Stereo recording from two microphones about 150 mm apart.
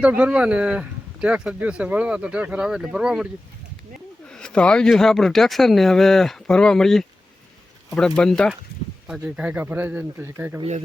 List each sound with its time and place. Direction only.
0.0 s speech: 10° right (ahead or behind)
4.4 s speech: 5° left (ahead or behind); by 10.6 s 15° right (ahead or behind)